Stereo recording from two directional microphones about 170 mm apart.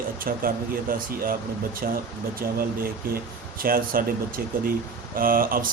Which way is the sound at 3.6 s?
55° right (ahead or behind).